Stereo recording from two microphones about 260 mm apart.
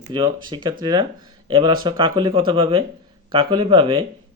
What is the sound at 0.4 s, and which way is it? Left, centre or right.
Speech, centre.